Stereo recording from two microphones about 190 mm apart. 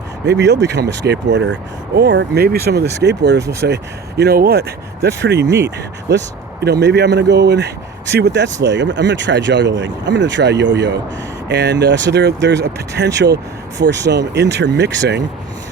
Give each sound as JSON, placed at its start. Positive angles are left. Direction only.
{"t": 0.3, "sound": "speech", "side_deg": -65}